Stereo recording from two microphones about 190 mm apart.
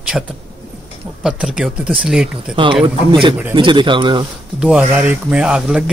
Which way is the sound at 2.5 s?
25° right (ahead or behind).